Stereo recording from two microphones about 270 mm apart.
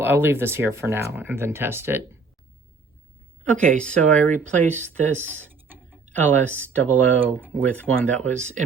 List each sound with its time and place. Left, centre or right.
0.0 s speech: centre
3.4 s speech: centre
4.7 s speech: right
5.5 s mechanisms: centre
6.2 s speech: centre